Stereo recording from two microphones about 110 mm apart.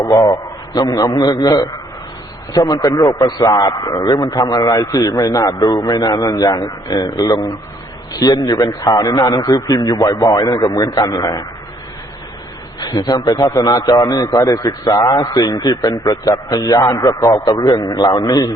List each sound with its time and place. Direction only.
0.0 s a man's voice: 35° left (ahead or behind)
12.8 s a man's voice: 40° left (ahead or behind)